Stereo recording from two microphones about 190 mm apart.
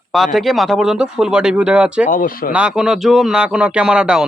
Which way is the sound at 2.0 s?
45° left (ahead or behind).